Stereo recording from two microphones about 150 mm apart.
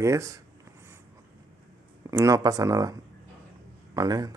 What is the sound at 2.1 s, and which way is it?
Speech, 20° right (ahead or behind).